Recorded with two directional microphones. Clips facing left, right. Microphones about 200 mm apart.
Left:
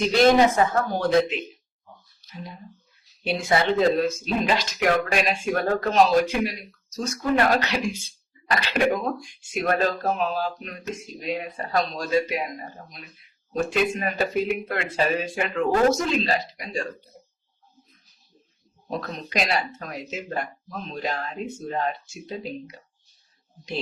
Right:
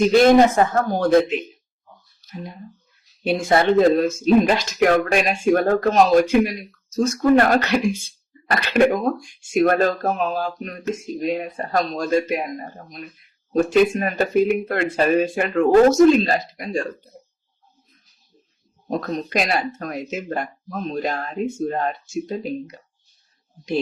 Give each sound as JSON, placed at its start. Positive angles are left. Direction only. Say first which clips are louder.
{"t": 0.3, "sound": "speech", "louder": "right 4 dB", "side_deg": -45}
{"t": 3.2, "sound": "speech", "louder": "right 5 dB", "side_deg": -50}
{"t": 18.9, "sound": "speech", "louder": "right 7 dB", "side_deg": -45}